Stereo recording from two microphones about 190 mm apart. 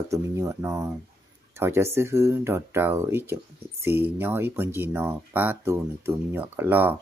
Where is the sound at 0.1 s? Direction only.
15° right (ahead or behind).